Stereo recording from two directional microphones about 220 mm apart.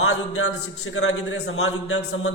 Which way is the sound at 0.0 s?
70° left (ahead or behind).